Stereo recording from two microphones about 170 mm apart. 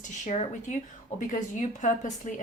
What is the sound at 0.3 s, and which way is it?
A woman's voice, 40° left (ahead or behind).